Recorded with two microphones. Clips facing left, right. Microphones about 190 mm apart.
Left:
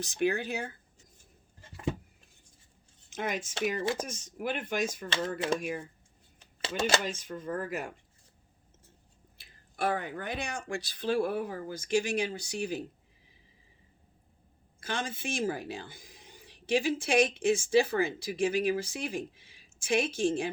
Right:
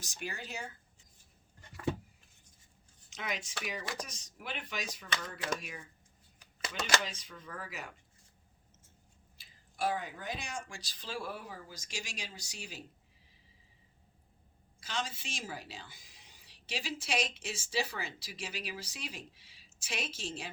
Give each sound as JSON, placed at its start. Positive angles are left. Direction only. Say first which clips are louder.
{"t": 0.0, "sound": "speech", "louder": "left 14 dB", "side_deg": 60}
{"t": 3.1, "sound": "speech", "louder": "left 7 dB", "side_deg": 50}
{"t": 5.0, "sound": "speech", "louder": "left 7 dB", "side_deg": 25}
{"t": 5.5, "sound": "speech", "louder": "left 12 dB", "side_deg": 55}
{"t": 6.4, "sound": "a sound", "louder": "left 9 dB", "side_deg": 25}
{"t": 7.0, "sound": "speech", "louder": "left 7 dB", "side_deg": 50}
{"t": 9.4, "sound": "speech", "louder": "left 3 dB", "side_deg": 60}
{"t": 14.8, "sound": "speech", "louder": "left 4 dB", "side_deg": 55}